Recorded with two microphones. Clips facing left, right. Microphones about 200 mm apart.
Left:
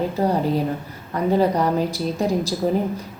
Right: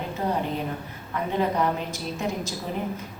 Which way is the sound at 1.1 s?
35° left (ahead or behind).